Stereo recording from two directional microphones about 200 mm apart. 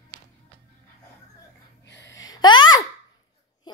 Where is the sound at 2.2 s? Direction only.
20° left (ahead or behind).